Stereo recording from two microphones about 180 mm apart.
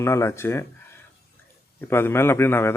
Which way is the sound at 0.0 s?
15° left (ahead or behind).